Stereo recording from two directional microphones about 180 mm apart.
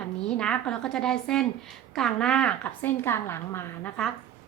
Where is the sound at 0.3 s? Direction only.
5° left (ahead or behind).